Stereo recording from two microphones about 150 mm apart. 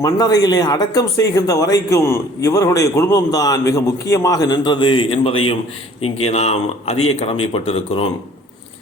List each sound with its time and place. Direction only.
0.0 s speech: 25° left (ahead or behind); by 8.1 s 40° left (ahead or behind)